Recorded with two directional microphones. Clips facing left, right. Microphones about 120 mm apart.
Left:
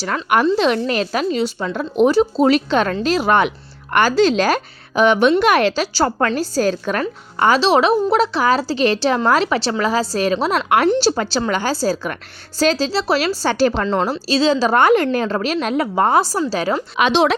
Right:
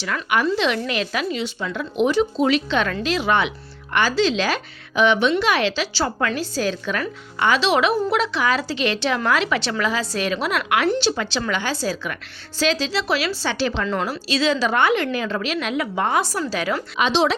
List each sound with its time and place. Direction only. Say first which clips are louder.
0.0 s a woman's voice: left 5 dB; 45° left (ahead or behind)
13.8 s a woman's voice: left 5 dB; 30° left (ahead or behind)
17.0 s speech: left 4 dB; 55° left (ahead or behind)